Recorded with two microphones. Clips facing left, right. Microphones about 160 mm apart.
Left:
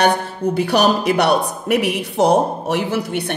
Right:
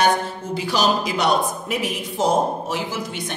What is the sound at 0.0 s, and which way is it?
A woman's voice, 65° left (ahead or behind).